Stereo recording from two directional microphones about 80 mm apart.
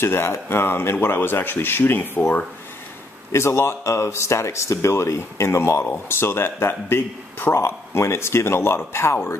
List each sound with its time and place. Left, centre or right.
0.0 s speech: left
3.3 s speech: left